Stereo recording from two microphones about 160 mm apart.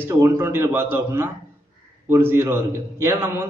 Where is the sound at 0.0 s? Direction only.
15° right (ahead or behind).